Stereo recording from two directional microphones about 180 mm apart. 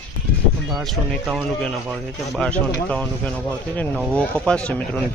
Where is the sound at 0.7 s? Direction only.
Centre (ahead or behind).